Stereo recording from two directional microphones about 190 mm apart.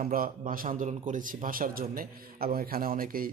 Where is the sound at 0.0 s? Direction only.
45° right (ahead or behind).